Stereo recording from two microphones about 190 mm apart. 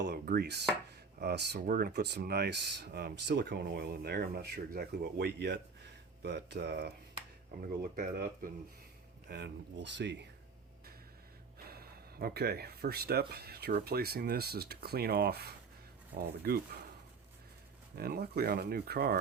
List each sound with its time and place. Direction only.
0.0 s a sound: 55° right (ahead or behind)
1.2 s speech: 60° right (ahead or behind)
9.3 s speech: 65° right (ahead or behind)
11.7 s speech: 55° right (ahead or behind)
17.9 s speech: 55° right (ahead or behind)